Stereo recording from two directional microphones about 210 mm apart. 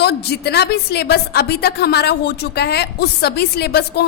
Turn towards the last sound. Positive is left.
turn(degrees=50)  # may be behind; listen again after turning